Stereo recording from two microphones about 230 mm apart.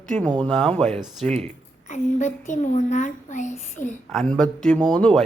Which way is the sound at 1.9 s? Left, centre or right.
Left.